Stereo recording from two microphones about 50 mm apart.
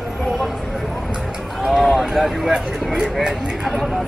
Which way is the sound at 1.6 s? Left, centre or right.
Centre.